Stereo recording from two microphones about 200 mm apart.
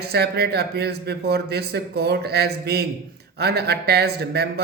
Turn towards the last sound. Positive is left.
turn(degrees=-55)  # may be behind; listen again after turning